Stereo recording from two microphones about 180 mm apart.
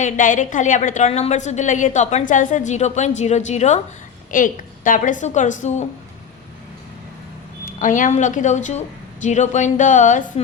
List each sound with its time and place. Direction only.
0.0 s a woman's voice: 45° left (ahead or behind)
7.6 s a woman's voice: 45° left (ahead or behind)